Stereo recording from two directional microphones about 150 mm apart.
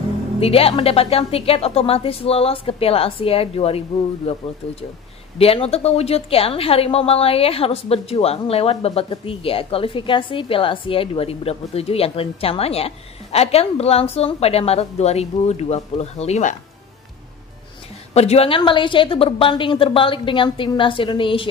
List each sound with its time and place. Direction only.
0.4 s a woman's voice: 40° left (ahead or behind)
18.1 s a woman's voice: 45° left (ahead or behind)